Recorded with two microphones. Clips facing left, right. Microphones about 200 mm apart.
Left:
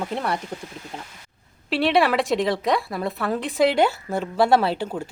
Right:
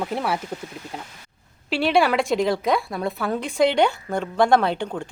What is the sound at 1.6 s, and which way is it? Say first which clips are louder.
A woman's voice: even; centre (ahead or behind).